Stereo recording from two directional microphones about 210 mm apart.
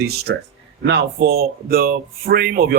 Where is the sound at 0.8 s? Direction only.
55° right (ahead or behind).